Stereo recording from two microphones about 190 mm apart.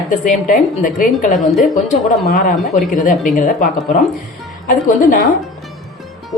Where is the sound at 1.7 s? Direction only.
45° left (ahead or behind).